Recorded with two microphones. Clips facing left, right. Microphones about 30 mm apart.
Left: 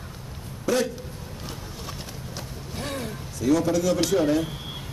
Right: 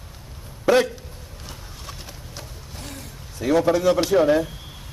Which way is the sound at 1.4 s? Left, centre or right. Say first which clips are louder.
Left 2 dB; centre.